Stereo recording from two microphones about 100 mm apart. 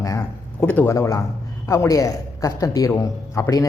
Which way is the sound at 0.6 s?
15° left (ahead or behind).